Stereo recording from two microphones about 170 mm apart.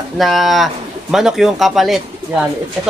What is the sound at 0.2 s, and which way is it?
Speech, centre (ahead or behind).